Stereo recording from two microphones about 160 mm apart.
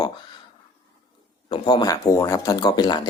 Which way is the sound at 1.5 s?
30° left (ahead or behind).